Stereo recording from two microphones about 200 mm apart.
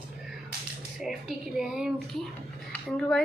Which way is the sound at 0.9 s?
Centre (ahead or behind).